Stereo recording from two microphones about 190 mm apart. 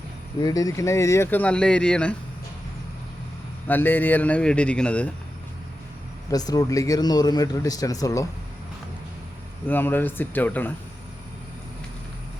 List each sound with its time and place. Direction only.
0.3 s speech: 20° left (ahead or behind)
3.7 s speech: 10° left (ahead or behind)
6.3 s speech: 20° left (ahead or behind)
9.6 s speech: 10° left (ahead or behind)